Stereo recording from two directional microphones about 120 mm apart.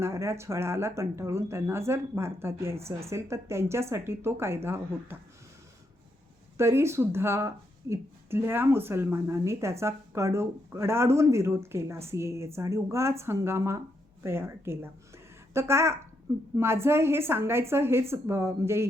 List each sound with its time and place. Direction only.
0.0 s speech: 25° right (ahead or behind)
6.6 s speech: 20° right (ahead or behind)